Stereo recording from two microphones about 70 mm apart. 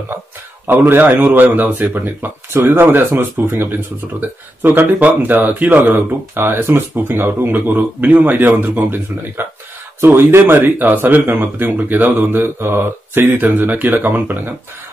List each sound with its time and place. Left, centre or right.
0.7 s speech: right